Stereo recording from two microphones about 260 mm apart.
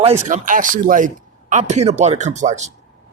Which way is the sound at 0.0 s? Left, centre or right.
Right.